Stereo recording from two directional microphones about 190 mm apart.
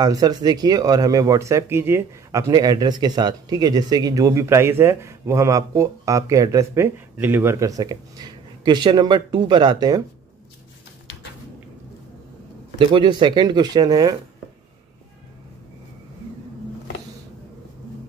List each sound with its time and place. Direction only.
0.0 s speech: 20° right (ahead or behind)
12.7 s speech: 25° right (ahead or behind)